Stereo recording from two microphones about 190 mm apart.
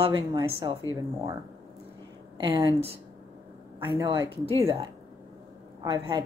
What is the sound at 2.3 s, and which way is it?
A woman's voice, 25° right (ahead or behind).